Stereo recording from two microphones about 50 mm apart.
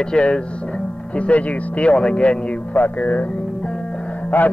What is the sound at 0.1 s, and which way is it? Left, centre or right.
Speech, centre.